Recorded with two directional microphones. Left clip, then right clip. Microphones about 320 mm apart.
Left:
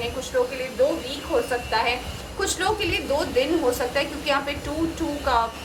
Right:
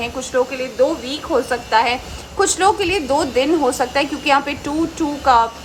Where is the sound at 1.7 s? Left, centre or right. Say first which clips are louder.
Right 9 dB; centre.